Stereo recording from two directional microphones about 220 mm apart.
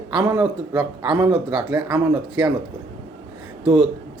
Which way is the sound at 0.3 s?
5° right (ahead or behind).